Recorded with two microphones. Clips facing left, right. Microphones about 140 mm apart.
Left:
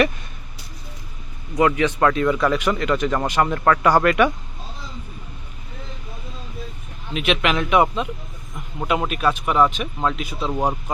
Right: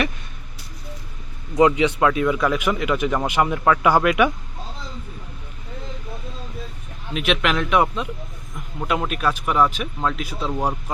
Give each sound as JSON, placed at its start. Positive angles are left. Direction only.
{"t": 1.5, "sound": "speech", "side_deg": -20}
{"t": 2.0, "sound": "speech", "side_deg": -5}
{"t": 7.1, "sound": "speech", "side_deg": 0}